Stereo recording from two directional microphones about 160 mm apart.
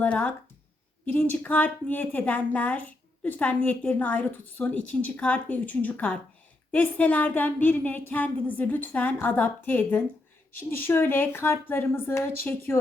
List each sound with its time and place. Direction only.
0.0 s a woman's voice: 10° left (ahead or behind)